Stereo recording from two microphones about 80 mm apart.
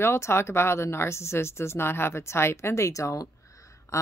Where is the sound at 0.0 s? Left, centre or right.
Left.